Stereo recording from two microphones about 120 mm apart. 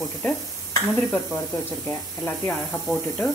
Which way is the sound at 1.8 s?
15° left (ahead or behind).